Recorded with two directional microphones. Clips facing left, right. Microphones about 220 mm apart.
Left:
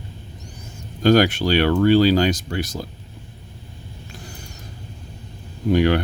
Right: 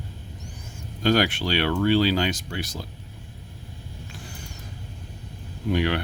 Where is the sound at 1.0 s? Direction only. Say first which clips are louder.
Left 6 dB; 45° left (ahead or behind).